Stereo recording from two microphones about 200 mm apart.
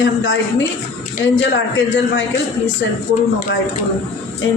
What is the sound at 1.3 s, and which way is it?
Speech, 65° left (ahead or behind).